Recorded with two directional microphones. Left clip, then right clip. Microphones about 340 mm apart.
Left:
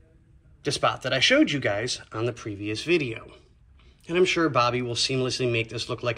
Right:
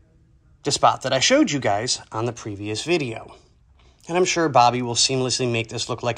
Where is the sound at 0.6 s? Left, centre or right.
Centre.